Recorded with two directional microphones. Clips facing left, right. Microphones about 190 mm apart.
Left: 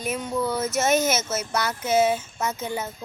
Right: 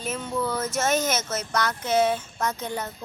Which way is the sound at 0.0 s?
10° left (ahead or behind).